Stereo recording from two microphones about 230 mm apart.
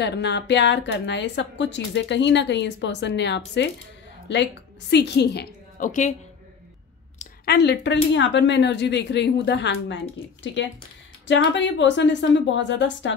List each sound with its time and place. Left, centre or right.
0.0 s a woman's voice: left
7.2 s a woman's voice: left
11.2 s a woman's voice: left